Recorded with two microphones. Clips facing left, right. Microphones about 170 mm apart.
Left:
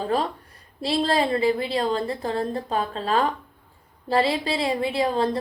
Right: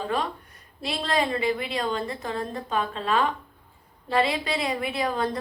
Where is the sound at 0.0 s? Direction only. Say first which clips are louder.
Left 4 dB; 35° left (ahead or behind).